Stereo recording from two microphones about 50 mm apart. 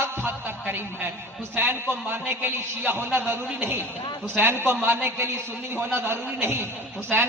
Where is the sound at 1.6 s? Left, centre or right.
Right.